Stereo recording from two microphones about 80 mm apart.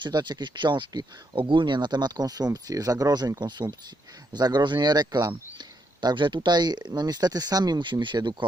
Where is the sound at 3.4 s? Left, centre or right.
Right.